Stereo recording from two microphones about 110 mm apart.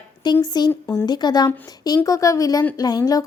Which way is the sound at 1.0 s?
40° left (ahead or behind).